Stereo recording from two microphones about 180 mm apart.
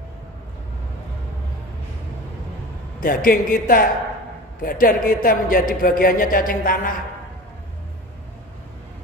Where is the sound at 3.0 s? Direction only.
50° left (ahead or behind).